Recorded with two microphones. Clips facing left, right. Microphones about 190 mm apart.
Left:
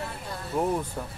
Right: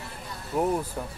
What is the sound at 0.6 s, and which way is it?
Speech, 5° right (ahead or behind).